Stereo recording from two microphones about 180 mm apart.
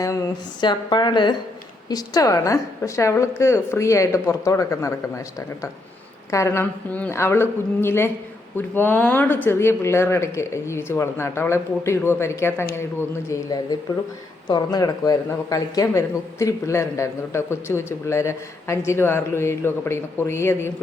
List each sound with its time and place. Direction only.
0.6 s a woman's voice: 25° left (ahead or behind)
6.3 s speech: 15° left (ahead or behind)